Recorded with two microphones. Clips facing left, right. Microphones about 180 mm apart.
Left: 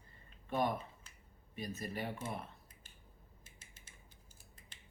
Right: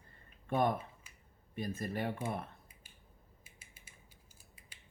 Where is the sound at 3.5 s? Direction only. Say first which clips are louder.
Even; 10° right (ahead or behind).